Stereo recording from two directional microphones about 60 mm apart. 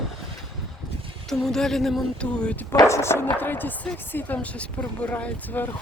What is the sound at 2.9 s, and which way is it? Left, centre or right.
Speech, left.